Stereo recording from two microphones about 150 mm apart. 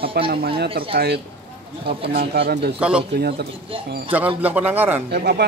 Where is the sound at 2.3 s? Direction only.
90° right.